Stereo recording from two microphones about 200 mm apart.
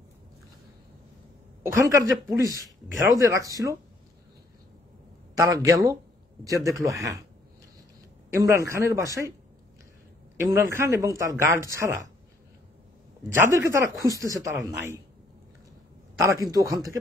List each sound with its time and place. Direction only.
1.6 s speech: 15° right (ahead or behind)
5.3 s speech: 15° right (ahead or behind)
8.3 s speech: 15° right (ahead or behind)
10.4 s speech: 15° right (ahead or behind)
13.3 s speech: 15° right (ahead or behind)
16.2 s speech: 15° right (ahead or behind)